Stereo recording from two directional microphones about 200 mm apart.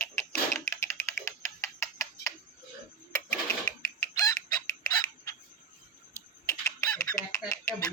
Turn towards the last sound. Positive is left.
turn(degrees=15)  # may be behind; listen again after turning